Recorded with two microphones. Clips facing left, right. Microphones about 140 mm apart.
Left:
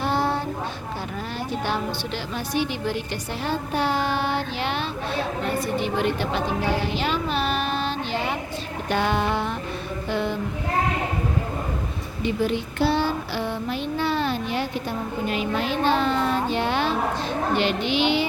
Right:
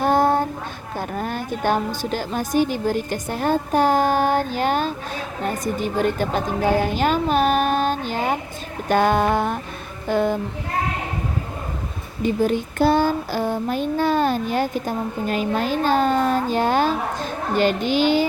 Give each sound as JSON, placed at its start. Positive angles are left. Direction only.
{"t": 0.0, "sound": "a sound", "side_deg": -50}
{"t": 1.1, "sound": "a woman's voice", "side_deg": -50}
{"t": 8.9, "sound": "child singing", "side_deg": -45}
{"t": 12.2, "sound": "child singing", "side_deg": -45}